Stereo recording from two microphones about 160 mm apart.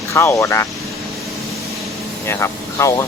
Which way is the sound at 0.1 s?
15° left (ahead or behind).